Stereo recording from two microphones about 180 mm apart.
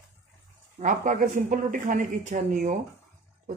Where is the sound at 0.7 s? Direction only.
45° right (ahead or behind).